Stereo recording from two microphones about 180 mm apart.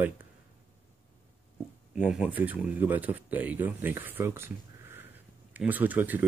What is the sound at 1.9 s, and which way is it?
Speech, 5° right (ahead or behind).